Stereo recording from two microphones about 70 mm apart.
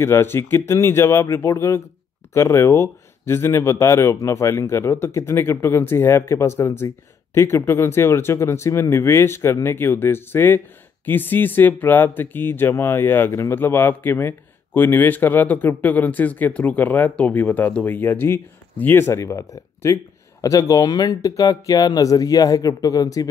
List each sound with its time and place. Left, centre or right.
0.0 s speech: left